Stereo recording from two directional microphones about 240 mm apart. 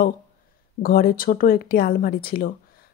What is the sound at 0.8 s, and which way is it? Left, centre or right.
A woman's voice, left.